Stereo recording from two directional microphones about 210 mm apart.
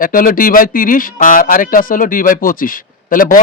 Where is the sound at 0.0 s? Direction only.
40° left (ahead or behind).